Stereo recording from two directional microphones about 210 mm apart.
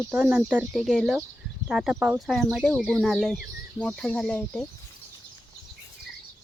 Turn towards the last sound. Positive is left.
turn(degrees=5)  # may be behind; listen again after turning